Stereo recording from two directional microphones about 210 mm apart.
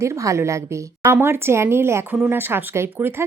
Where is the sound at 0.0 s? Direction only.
15° right (ahead or behind).